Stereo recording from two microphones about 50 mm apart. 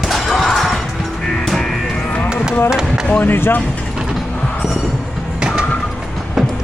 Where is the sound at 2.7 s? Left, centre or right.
Centre.